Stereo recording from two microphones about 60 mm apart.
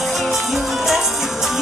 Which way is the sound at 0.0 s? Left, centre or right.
Centre.